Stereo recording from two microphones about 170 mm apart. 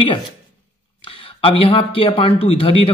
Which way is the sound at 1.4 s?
30° left (ahead or behind).